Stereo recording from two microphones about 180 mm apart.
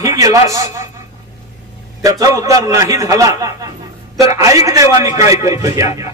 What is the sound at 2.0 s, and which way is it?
A man's voice, 20° right (ahead or behind).